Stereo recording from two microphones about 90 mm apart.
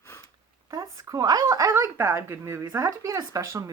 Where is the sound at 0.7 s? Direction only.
40° right (ahead or behind).